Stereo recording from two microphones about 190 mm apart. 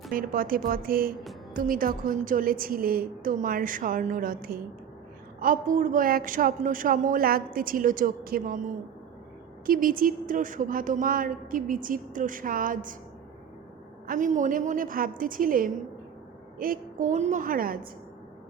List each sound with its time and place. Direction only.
0.1 s a woman's voice: 50° right (ahead or behind)
9.6 s a woman's voice: 50° right (ahead or behind)
14.1 s a woman's voice: 40° right (ahead or behind)